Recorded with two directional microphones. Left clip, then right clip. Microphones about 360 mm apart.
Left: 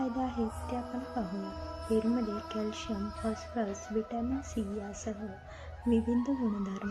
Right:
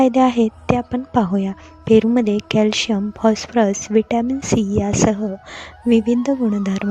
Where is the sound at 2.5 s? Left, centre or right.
Right.